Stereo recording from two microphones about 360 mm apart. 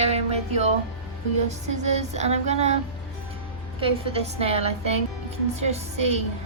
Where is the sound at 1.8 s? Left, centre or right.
Centre.